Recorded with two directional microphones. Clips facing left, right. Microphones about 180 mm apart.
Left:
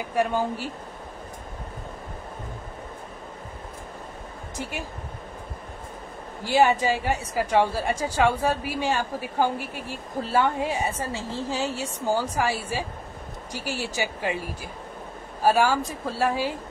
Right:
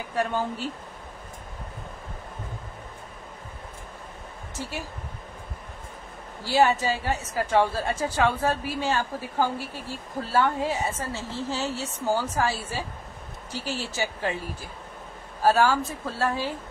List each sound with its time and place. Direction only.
0.1 s a woman's voice: 10° left (ahead or behind)
4.6 s a woman's voice: 15° left (ahead or behind)
6.4 s a woman's voice: 15° left (ahead or behind)